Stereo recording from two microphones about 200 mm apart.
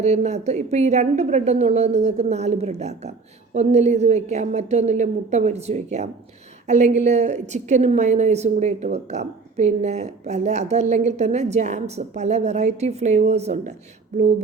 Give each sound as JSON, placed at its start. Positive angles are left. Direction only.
{"t": 0.0, "sound": "a woman's voice", "side_deg": -35}